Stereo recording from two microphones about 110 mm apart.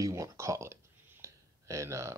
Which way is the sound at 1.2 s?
25° right (ahead or behind).